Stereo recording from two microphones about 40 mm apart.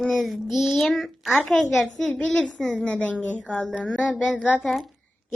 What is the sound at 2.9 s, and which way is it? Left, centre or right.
Speech, left.